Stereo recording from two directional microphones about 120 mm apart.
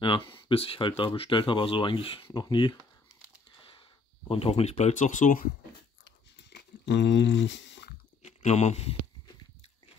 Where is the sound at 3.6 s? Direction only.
45° left (ahead or behind); by 5.3 s 90° left.